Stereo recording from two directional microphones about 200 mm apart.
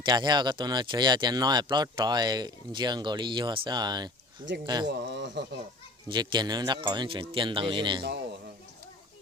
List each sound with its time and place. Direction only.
0.0 s speech: 20° right (ahead or behind)
4.9 s speech: 60° right (ahead or behind)
6.1 s speech: 20° right (ahead or behind)